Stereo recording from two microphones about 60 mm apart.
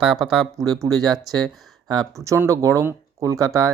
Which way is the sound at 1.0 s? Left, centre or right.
Right.